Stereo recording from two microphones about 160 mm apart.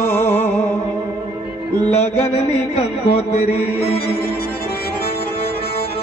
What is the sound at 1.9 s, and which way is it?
Music, 40° left (ahead or behind).